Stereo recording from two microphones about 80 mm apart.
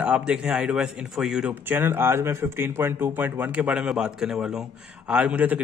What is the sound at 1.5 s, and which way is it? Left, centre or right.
Speech, right.